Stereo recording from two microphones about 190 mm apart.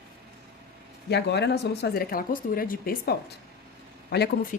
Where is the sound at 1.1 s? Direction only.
60° left (ahead or behind).